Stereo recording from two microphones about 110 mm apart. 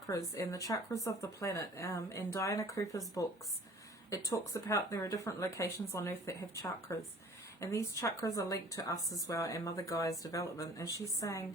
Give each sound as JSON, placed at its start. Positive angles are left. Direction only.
{"t": 0.1, "sound": "speech", "side_deg": 30}
{"t": 4.1, "sound": "speech", "side_deg": 30}